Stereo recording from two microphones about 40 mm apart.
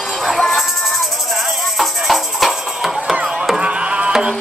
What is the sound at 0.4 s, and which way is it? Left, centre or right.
Music, centre.